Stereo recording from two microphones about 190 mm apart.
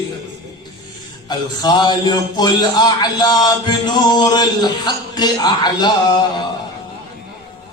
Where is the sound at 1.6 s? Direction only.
20° left (ahead or behind).